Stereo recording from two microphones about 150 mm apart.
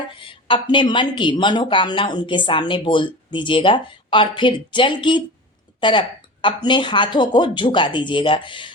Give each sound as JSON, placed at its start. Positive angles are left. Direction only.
{"t": 0.2, "sound": "speech", "side_deg": 35}